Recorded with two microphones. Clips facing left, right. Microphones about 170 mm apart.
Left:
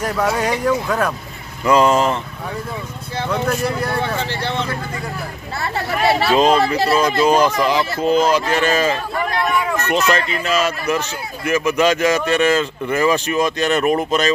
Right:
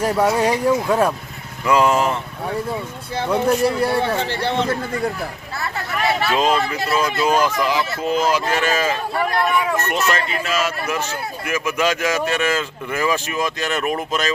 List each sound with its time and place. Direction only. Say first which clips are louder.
0.0 s speech: right 2 dB; 30° right (ahead or behind)
1.6 s speech: left 2 dB; 10° right (ahead or behind)
3.3 s speech: right 4 dB; 30° right (ahead or behind)
5.5 s speech: left 4 dB; 30° left (ahead or behind)
6.3 s speech: left 5 dB; 5° right (ahead or behind)
6.6 s speech: left 6 dB; 35° left (ahead or behind)
7.2 s speech: left 2 dB; 5° right (ahead or behind)
10.2 s speech: left 3 dB; 5° right (ahead or behind)